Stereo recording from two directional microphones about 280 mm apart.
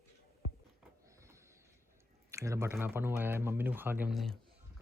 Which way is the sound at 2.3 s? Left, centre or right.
Centre.